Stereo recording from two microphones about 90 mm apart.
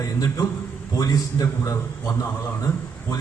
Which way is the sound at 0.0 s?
40° left (ahead or behind).